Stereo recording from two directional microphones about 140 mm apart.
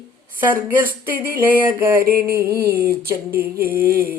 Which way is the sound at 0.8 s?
90° right.